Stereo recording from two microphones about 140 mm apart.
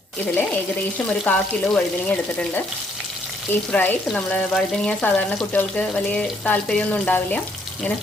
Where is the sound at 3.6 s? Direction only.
10° left (ahead or behind).